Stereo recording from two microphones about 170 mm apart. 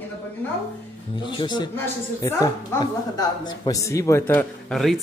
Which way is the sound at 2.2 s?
15° left (ahead or behind).